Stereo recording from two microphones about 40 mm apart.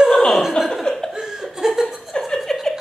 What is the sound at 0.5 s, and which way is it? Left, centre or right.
Laughter, centre.